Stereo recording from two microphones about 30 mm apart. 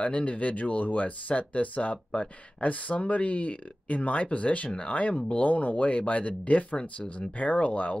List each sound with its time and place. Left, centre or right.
0.0 s speech: left
5.5 s speech: left